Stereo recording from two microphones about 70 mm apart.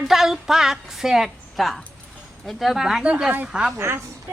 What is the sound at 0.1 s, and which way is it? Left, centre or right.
A woman's voice, centre.